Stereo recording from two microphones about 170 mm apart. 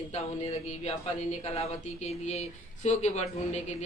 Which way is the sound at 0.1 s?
40° left (ahead or behind).